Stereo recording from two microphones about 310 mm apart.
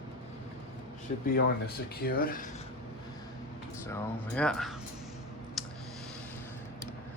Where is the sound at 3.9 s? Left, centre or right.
Centre.